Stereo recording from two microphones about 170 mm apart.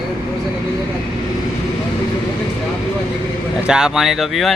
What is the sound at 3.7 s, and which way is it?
Speech, 5° right (ahead or behind).